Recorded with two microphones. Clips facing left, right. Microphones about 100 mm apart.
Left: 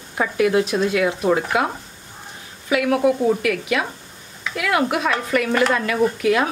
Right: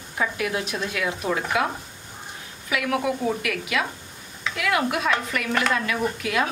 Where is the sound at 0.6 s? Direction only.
35° left (ahead or behind).